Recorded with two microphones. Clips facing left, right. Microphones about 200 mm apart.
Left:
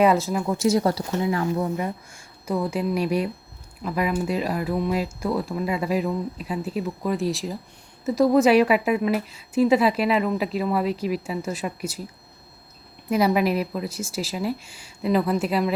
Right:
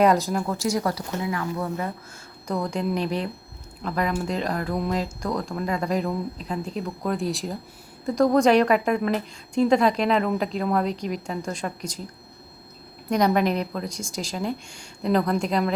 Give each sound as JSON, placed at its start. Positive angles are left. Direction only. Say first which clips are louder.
{"t": 0.0, "sound": "a woman's voice", "louder": "even", "side_deg": 5}
{"t": 0.5, "sound": "speech", "louder": "left 8 dB", "side_deg": 25}
{"t": 2.5, "sound": "a woman's voice", "louder": "left 2 dB", "side_deg": 5}
{"t": 13.1, "sound": "a woman's voice", "louder": "left 1 dB", "side_deg": 5}